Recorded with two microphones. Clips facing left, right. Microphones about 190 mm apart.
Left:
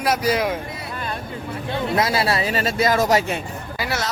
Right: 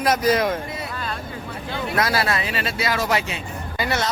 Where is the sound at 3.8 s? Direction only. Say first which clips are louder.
Right 2 dB; 5° left (ahead or behind).